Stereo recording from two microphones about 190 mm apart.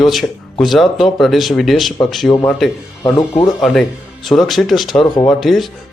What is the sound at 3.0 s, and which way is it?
Speech, 20° left (ahead or behind).